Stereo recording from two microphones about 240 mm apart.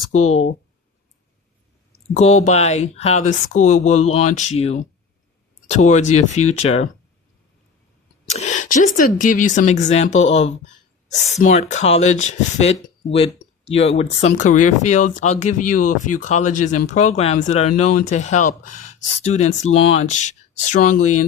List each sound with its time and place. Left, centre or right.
2.1 s speech: left
8.3 s speech: left